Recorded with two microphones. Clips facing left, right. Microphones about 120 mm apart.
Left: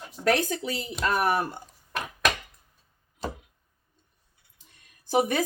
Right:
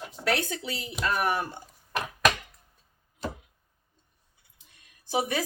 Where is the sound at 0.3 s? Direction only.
40° left (ahead or behind).